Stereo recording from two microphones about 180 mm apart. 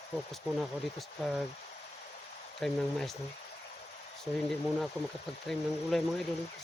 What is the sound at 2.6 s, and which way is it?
Speech, centre (ahead or behind).